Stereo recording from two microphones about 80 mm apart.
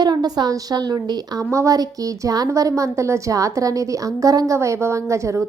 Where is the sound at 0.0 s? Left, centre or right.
Right.